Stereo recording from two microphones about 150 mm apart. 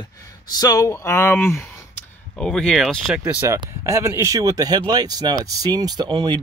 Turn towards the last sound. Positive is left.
turn(degrees=-30)  # may be behind; listen again after turning